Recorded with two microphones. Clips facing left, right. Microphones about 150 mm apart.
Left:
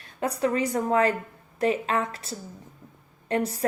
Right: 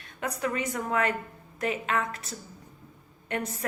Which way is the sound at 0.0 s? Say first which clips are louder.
Left 5 dB; 30° left (ahead or behind).